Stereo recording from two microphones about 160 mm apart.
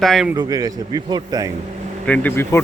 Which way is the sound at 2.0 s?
10° left (ahead or behind).